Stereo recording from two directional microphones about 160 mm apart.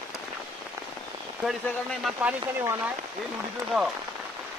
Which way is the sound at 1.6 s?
Centre (ahead or behind).